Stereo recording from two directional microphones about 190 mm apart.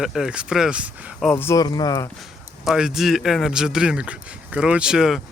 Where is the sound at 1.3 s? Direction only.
10° left (ahead or behind).